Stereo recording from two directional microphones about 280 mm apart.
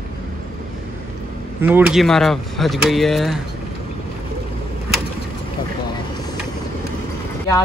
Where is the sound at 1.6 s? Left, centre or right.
Centre.